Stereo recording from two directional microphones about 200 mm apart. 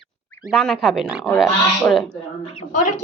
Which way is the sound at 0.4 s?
Centre (ahead or behind).